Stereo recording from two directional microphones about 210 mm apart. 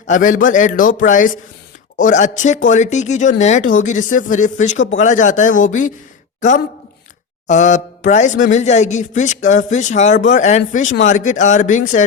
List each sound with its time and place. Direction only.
0.1 s speech: 40° left (ahead or behind)